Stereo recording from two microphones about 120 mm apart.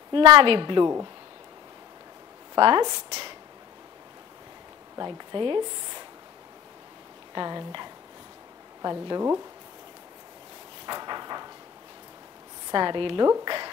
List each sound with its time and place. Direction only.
0.1 s speech: 45° right (ahead or behind)
2.5 s speech: 35° right (ahead or behind)
4.9 s speech: 35° right (ahead or behind)
7.3 s speech: 35° right (ahead or behind)
10.9 s a sound: 35° right (ahead or behind)
12.7 s speech: 40° right (ahead or behind)